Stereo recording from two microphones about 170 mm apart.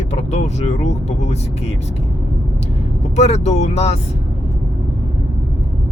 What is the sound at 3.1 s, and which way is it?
Speech, 40° left (ahead or behind).